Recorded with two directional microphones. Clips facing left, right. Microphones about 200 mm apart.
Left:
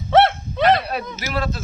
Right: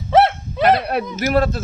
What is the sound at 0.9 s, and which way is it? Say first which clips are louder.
Speech: right 7 dB; 55° right (ahead or behind).